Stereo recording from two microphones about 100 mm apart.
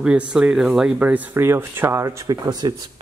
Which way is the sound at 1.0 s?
15° right (ahead or behind).